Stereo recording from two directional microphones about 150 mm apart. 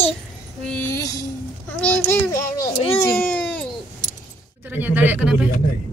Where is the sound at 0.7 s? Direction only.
10° left (ahead or behind).